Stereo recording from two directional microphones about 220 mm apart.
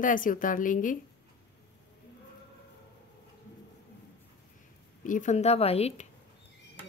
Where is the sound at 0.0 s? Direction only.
40° left (ahead or behind).